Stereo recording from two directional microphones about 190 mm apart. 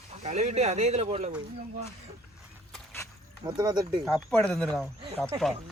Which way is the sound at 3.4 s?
25° right (ahead or behind).